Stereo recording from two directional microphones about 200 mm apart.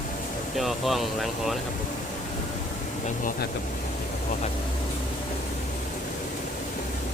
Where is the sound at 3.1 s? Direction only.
40° left (ahead or behind).